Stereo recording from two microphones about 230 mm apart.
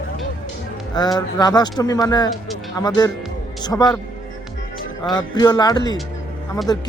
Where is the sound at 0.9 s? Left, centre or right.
Centre.